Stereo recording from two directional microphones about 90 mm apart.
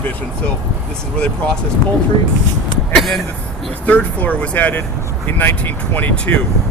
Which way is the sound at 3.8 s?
15° left (ahead or behind).